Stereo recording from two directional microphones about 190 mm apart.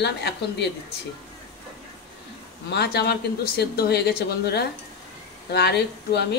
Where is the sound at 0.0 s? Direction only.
60° left (ahead or behind).